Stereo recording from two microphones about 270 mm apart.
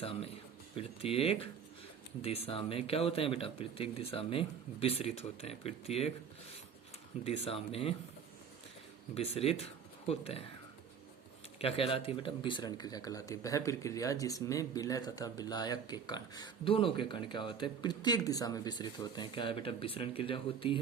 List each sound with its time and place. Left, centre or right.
0.0 s speech: left
7.3 s speech: left
9.1 s speech: left
11.6 s speech: left